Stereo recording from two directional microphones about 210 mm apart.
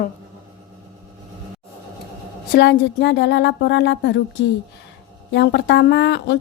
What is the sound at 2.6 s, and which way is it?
A woman's voice, 55° left (ahead or behind).